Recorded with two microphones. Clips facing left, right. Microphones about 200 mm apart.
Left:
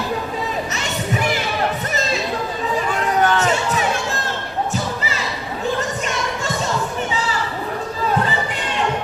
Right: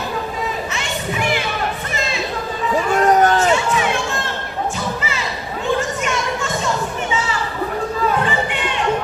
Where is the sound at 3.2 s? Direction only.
40° right (ahead or behind).